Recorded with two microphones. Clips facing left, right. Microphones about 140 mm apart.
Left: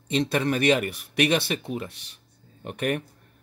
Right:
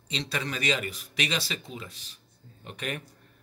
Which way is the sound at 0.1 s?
55° left (ahead or behind).